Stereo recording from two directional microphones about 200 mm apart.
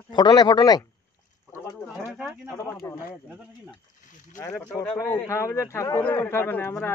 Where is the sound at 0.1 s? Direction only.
20° left (ahead or behind).